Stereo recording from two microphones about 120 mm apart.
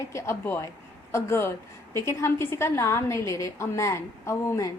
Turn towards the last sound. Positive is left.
turn(degrees=25)  # may be behind; listen again after turning